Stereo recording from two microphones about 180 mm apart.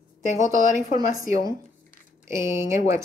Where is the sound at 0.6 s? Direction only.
45° left (ahead or behind).